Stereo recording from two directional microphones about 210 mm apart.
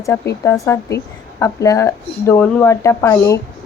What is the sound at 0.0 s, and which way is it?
A woman's voice, 15° left (ahead or behind).